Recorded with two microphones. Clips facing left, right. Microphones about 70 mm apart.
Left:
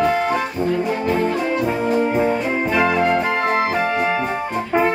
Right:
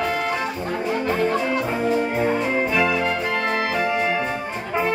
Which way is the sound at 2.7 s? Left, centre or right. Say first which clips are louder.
Left 4 dB; left.